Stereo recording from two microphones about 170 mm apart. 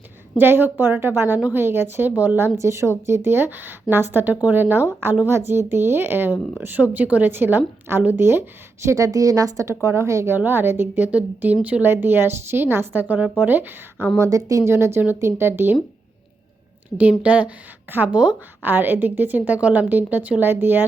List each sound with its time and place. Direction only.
0.3 s a woman's voice: 10° right (ahead or behind)
17.0 s a woman's voice: 5° right (ahead or behind)